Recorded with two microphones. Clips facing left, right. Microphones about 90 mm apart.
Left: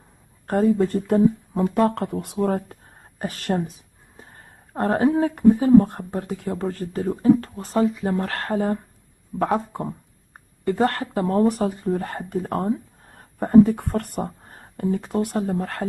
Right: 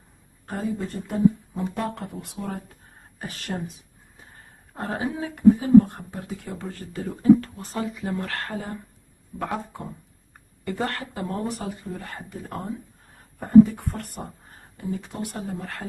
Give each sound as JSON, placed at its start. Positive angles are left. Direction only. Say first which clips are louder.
{"t": 0.5, "sound": "speech", "louder": "left 10 dB", "side_deg": 55}